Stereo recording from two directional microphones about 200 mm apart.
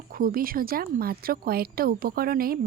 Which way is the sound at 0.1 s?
45° right (ahead or behind).